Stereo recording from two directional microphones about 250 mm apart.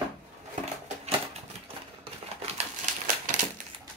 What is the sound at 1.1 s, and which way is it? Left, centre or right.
Typewriter, right.